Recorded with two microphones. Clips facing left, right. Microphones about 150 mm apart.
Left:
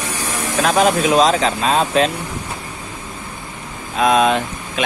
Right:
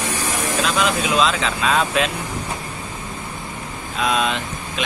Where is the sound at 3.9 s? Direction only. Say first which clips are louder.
Left 7 dB; 45° left (ahead or behind).